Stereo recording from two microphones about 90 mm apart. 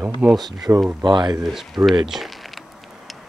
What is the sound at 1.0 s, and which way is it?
Speech, 55° right (ahead or behind).